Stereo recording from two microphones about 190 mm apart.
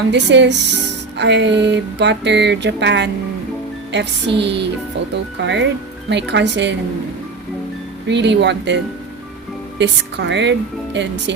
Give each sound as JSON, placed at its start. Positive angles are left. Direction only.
{"t": 0.1, "sound": "speech", "side_deg": -65}
{"t": 8.0, "sound": "speech", "side_deg": -65}